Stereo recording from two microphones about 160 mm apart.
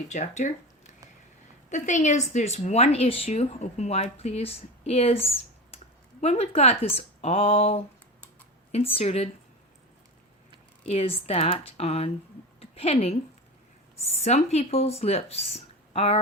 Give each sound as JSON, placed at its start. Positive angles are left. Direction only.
{"t": 0.1, "sound": "speech", "side_deg": 50}
{"t": 1.7, "sound": "a woman's voice", "side_deg": 50}
{"t": 10.8, "sound": "a woman's voice", "side_deg": 40}
{"t": 12.5, "sound": "a sound", "side_deg": 40}
{"t": 14.0, "sound": "a woman's voice", "side_deg": 40}